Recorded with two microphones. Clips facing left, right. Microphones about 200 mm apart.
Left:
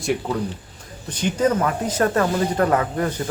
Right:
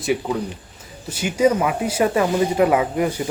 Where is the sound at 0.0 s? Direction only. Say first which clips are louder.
Right 1 dB; centre (ahead or behind).